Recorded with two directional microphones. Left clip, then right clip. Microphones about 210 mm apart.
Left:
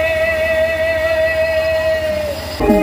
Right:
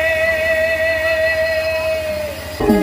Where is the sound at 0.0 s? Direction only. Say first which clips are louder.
Even; 50° right (ahead or behind).